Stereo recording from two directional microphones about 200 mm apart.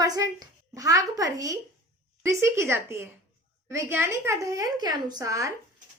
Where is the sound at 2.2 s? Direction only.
15° right (ahead or behind).